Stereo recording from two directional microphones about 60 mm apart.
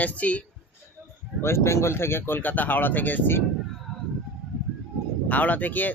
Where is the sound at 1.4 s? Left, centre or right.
Left.